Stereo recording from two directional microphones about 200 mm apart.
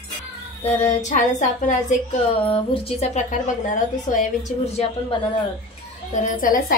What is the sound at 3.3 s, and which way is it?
A woman's voice, 40° left (ahead or behind).